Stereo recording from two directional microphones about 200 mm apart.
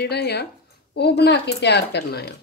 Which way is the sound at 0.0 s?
55° left (ahead or behind).